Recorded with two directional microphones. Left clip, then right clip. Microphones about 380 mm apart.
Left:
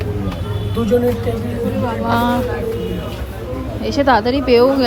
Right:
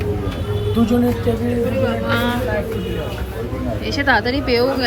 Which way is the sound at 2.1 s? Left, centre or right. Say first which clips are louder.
Left 3 dB; centre.